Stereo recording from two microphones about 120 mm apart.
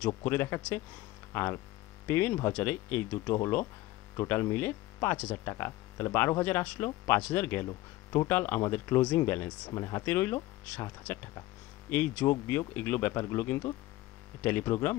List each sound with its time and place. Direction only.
0.0 s speech: 20° left (ahead or behind)
7.6 s speech: 30° left (ahead or behind)
8.3 s speech: 20° left (ahead or behind)